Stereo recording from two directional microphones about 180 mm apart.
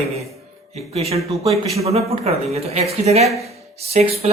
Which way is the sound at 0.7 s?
35° right (ahead or behind).